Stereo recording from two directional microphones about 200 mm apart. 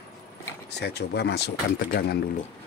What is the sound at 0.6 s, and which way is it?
Speech, 55° left (ahead or behind).